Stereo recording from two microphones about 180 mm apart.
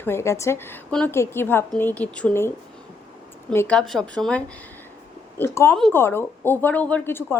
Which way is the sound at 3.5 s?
15° left (ahead or behind).